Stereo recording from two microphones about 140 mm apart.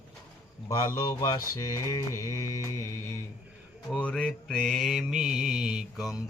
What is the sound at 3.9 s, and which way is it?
Mantra, 10° left (ahead or behind).